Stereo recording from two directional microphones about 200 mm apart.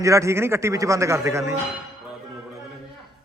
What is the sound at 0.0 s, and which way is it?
Speech, 15° right (ahead or behind).